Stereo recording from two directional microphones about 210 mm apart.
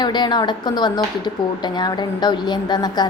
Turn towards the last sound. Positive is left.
turn(degrees=20)  # may be behind; listen again after turning